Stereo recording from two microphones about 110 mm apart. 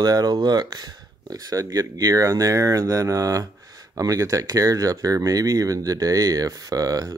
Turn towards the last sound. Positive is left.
turn(degrees=-30)  # may be behind; listen again after turning